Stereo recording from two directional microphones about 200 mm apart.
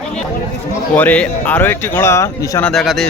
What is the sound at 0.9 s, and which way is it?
A man's voice, 5° left (ahead or behind).